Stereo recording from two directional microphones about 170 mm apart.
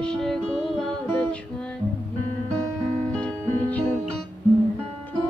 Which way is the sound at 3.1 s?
5° left (ahead or behind).